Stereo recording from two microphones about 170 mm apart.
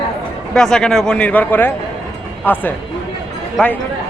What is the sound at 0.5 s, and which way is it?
A man's voice, 5° left (ahead or behind).